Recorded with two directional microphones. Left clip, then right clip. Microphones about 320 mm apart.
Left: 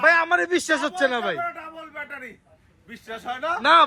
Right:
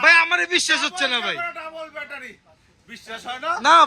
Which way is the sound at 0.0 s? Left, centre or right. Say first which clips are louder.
Right 3 dB; centre.